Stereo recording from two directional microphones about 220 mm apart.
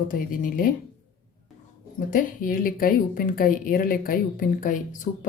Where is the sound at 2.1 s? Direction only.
40° left (ahead or behind).